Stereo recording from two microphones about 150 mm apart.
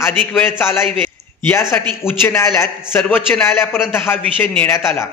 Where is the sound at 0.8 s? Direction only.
35° right (ahead or behind).